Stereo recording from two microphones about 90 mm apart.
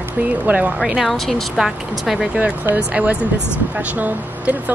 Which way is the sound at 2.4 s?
15° right (ahead or behind).